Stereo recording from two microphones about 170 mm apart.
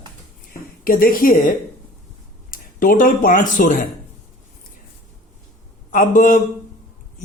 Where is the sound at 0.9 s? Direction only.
55° left (ahead or behind).